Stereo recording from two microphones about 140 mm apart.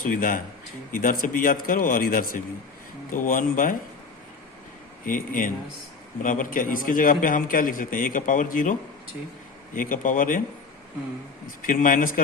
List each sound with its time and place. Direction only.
0.0 s a man's voice: 80° left
3.1 s a man's voice: 75° left (ahead or behind)
5.0 s a man's voice: 75° left (ahead or behind)
9.7 s a man's voice: 75° left (ahead or behind)
11.6 s a man's voice: 75° left (ahead or behind)